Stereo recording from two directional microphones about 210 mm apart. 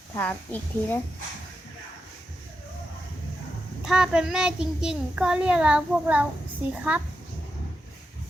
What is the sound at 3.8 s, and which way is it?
A child's voice, centre (ahead or behind).